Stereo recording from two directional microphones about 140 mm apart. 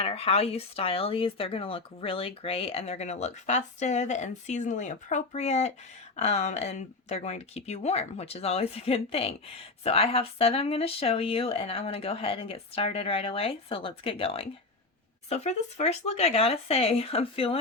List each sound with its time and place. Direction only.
0.0 s speech: 45° left (ahead or behind)
15.3 s speech: 55° left (ahead or behind)